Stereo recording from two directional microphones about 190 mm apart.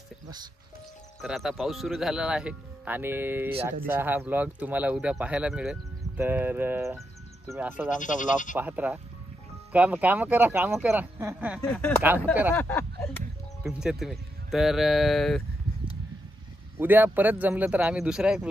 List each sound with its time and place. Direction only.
1.2 s speech: centre (ahead or behind)
7.9 s speech: 40° left (ahead or behind)
8.5 s speech: 10° right (ahead or behind)
11.6 s speech: 5° left (ahead or behind)
13.7 s speech: 5° right (ahead or behind)
16.7 s speech: 10° right (ahead or behind)